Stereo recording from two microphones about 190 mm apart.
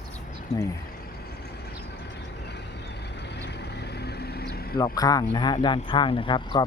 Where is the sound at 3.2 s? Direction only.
65° left (ahead or behind).